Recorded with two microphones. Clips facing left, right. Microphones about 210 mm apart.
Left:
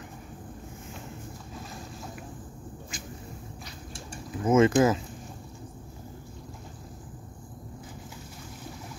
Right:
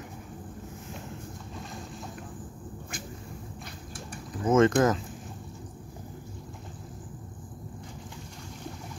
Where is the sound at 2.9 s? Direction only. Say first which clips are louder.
Right 3 dB; 55° right (ahead or behind).